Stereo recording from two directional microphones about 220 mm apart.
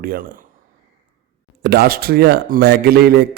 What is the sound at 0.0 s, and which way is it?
Speech, 40° right (ahead or behind).